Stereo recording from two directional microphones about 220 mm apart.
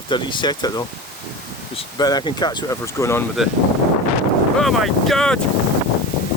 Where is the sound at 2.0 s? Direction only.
20° left (ahead or behind).